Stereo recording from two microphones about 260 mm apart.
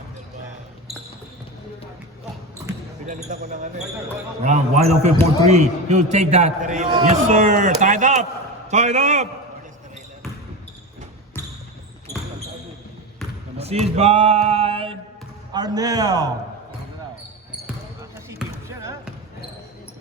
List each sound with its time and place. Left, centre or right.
3.1 s a man's voice: right
13.6 s a man's voice: right
18.3 s basketball bounce: centre